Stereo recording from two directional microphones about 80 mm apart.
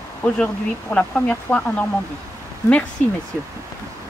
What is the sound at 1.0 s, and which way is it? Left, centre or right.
Speech, centre.